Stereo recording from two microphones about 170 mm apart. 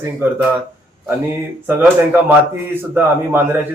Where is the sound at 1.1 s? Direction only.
15° right (ahead or behind).